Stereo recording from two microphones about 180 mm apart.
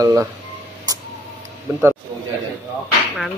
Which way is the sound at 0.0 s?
15° right (ahead or behind).